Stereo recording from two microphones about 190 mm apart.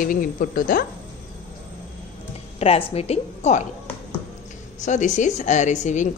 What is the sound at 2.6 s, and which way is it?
Speech, 30° left (ahead or behind).